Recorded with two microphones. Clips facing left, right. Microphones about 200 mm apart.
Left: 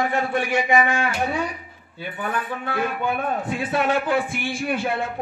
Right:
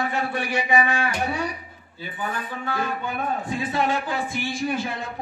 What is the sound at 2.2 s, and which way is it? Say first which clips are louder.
A man's voice: left 3 dB; 60° left (ahead or behind).